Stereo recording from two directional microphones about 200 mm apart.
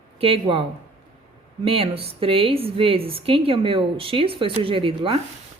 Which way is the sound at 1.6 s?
25° right (ahead or behind).